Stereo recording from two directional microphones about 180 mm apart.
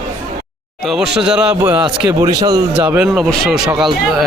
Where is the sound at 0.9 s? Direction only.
Centre (ahead or behind).